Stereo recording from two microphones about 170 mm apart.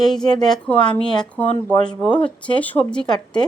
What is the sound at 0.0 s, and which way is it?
Speech, centre (ahead or behind).